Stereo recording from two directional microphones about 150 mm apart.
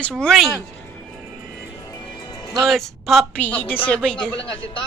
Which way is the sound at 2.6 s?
Centre (ahead or behind).